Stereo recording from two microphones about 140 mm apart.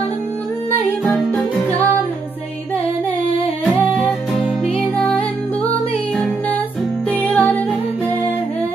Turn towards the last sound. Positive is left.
turn(degrees=10)  # may be behind; listen again after turning